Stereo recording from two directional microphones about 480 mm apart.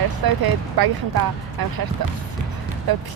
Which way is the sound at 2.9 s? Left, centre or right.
Right.